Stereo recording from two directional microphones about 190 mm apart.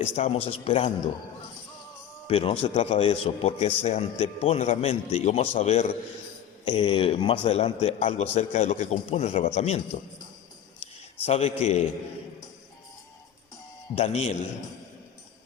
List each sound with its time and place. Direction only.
0.0 s a man's voice: 35° left (ahead or behind)
2.2 s a man's voice: 30° left (ahead or behind)
11.3 s a man's voice: 35° left (ahead or behind)
13.9 s a man's voice: 35° left (ahead or behind)